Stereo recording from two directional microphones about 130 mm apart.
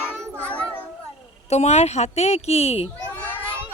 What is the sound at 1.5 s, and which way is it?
Speech, 60° left (ahead or behind).